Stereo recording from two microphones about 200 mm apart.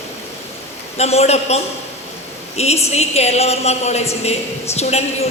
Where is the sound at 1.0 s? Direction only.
30° left (ahead or behind).